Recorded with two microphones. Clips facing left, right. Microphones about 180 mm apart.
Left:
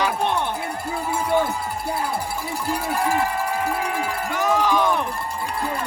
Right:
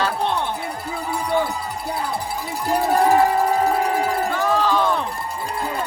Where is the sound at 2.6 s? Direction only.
35° right (ahead or behind).